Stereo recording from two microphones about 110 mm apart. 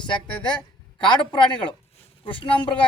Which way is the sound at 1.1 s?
45° left (ahead or behind).